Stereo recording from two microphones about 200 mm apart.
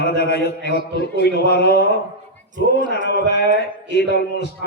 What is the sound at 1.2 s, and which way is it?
Speech, 55° left (ahead or behind).